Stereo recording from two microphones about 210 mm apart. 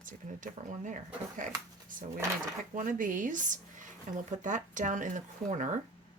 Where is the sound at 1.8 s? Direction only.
40° right (ahead or behind).